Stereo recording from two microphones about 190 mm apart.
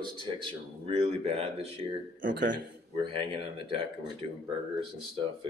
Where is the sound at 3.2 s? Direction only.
25° right (ahead or behind).